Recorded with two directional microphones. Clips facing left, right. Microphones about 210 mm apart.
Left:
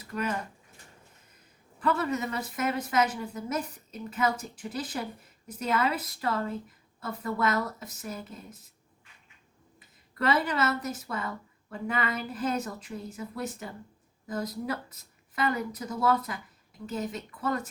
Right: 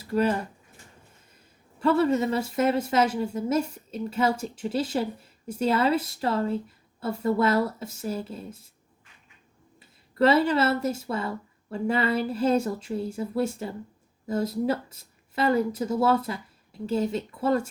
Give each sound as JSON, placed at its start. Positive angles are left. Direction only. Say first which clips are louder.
{"t": 0.0, "sound": "speech", "louder": "right 8 dB", "side_deg": -30}
{"t": 1.8, "sound": "a woman's voice", "louder": "right 7 dB", "side_deg": -30}
{"t": 9.8, "sound": "a woman's voice", "louder": "right 8 dB", "side_deg": -30}